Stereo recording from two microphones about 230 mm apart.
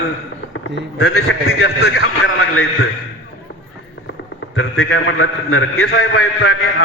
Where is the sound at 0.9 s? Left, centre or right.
Left.